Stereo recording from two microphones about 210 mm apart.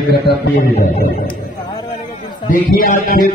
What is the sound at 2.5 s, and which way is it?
Music, 45° left (ahead or behind).